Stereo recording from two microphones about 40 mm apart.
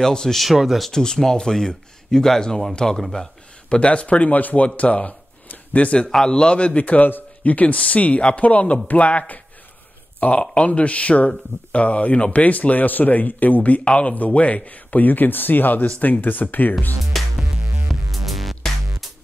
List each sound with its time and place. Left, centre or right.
0.0 s speech: centre
0.4 s speech: centre
0.9 s speech: centre
3.6 s speech: left
4.6 s speech: left
6.0 s speech: centre
6.3 s a man's voice: left
10.3 s speech: left
13.8 s a man's voice: left
14.1 s speech: left
17.1 s music: centre